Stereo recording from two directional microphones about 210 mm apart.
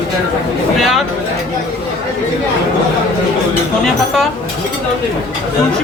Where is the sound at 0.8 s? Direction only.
Centre (ahead or behind).